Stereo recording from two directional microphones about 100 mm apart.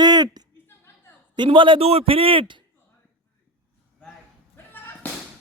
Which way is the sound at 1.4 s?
55° right (ahead or behind).